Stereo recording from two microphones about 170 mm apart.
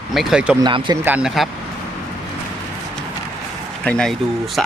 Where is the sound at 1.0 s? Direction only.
5° right (ahead or behind).